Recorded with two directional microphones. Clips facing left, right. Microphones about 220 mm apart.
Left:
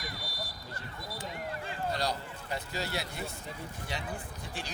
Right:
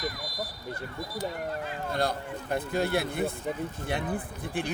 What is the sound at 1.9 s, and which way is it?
A man's voice, 55° right (ahead or behind).